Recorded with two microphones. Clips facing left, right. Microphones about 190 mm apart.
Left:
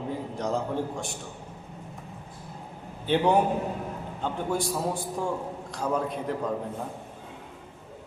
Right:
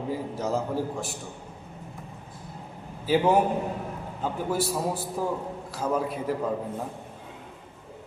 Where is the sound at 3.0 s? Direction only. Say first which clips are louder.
Right 1 dB; 5° right (ahead or behind).